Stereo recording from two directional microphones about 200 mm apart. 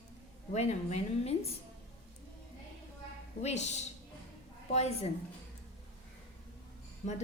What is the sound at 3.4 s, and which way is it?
A woman's voice, 35° left (ahead or behind).